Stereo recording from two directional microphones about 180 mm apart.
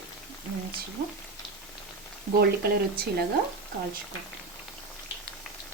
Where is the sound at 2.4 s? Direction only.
60° right (ahead or behind).